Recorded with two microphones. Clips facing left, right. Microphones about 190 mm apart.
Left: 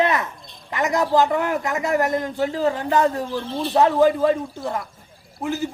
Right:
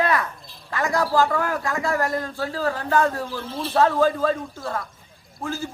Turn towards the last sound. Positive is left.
turn(degrees=20)  # may be behind; listen again after turning